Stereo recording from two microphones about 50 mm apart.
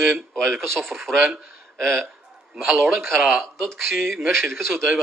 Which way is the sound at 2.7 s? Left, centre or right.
Right.